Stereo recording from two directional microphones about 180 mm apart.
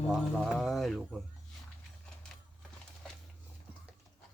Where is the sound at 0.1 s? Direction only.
5° right (ahead or behind).